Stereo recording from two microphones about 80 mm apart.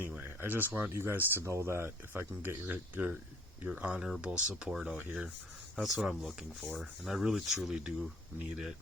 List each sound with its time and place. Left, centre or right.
0.0 s a sound: right
0.9 s speech: right; by 4.9 s centre
4.9 s speech: centre
5.7 s speech: centre